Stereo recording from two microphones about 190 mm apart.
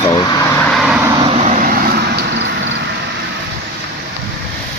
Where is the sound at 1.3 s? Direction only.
35° right (ahead or behind); by 2.5 s 60° right (ahead or behind).